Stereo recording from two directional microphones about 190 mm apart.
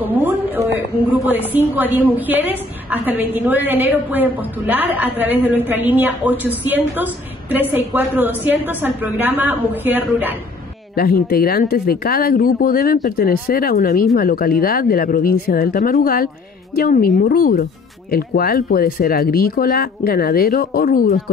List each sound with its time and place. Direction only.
0.0 s a sound: 10° right (ahead or behind)
1.1 s a woman's voice: 10° right (ahead or behind)
11.0 s speech: 50° left (ahead or behind)